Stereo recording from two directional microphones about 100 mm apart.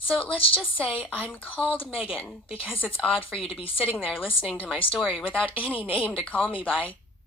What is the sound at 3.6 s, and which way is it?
Speech, 65° left (ahead or behind).